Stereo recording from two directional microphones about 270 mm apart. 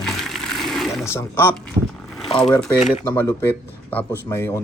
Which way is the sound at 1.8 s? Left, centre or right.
Centre.